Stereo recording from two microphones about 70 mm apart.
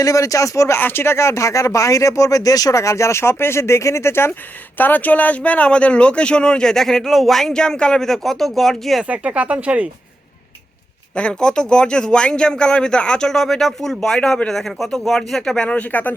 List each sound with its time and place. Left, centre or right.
0.0 s speech: left
0.8 s speech: left
4.8 s speech: left; by 9.0 s centre
9.0 s speech: centre
11.1 s speech: centre